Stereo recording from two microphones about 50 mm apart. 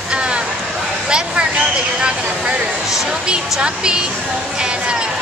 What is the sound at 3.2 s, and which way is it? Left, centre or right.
Speech, centre.